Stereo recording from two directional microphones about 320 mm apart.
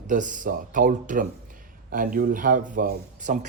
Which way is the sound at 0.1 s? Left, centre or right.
Right.